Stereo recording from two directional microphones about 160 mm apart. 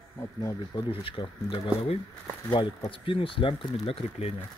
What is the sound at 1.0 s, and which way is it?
Speech, 35° left (ahead or behind).